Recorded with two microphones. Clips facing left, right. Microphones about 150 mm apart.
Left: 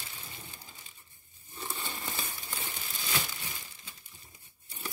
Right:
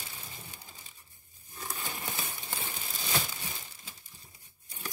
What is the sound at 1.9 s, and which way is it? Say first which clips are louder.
Crumpling: even; centre (ahead or behind).